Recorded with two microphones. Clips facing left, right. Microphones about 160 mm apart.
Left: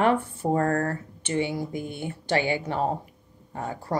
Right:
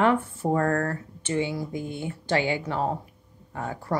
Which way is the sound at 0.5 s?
30° left (ahead or behind).